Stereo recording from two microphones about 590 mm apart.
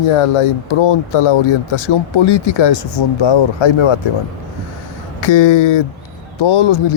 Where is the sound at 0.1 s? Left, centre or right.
Left.